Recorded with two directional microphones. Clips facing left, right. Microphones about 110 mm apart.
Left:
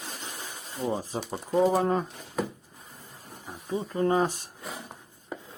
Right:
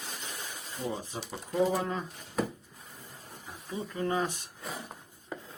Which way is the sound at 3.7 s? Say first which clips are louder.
Left 6 dB; 35° left (ahead or behind).